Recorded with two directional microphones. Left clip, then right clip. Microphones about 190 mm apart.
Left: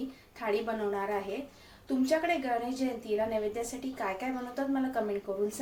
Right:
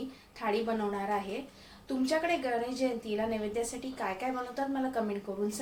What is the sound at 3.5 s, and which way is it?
A woman's voice, centre (ahead or behind).